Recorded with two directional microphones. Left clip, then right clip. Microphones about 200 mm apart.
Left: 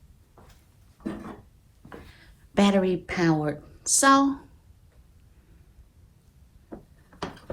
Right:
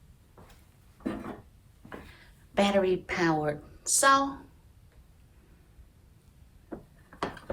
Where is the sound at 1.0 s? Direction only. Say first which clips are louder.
Even; 20° left (ahead or behind).